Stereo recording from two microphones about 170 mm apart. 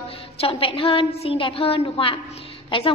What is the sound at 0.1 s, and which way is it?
A woman's voice, 35° left (ahead or behind).